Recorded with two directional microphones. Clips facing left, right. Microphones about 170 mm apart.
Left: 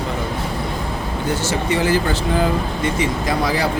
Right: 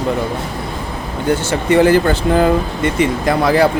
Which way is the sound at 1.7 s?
55° right (ahead or behind).